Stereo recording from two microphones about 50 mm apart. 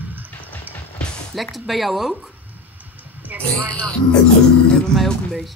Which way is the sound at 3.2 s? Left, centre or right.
Right.